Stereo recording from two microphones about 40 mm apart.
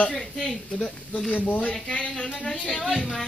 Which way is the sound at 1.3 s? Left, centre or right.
Left.